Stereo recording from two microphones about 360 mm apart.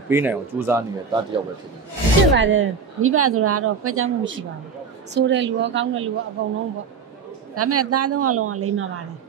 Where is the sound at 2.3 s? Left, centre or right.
Right.